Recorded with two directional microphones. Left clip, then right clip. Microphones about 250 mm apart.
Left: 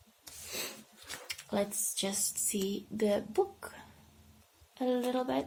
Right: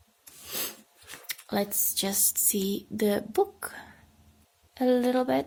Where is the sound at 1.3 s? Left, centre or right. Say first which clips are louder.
Right 4 dB; right.